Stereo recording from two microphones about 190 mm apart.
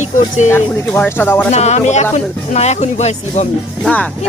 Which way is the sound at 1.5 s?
35° left (ahead or behind).